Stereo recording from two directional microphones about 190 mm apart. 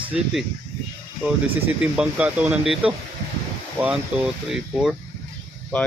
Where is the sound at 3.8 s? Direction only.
15° right (ahead or behind).